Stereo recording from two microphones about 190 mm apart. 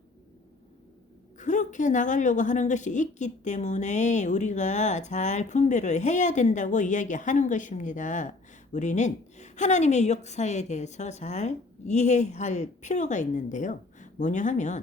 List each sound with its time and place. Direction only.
1.4 s a woman's voice: 40° left (ahead or behind)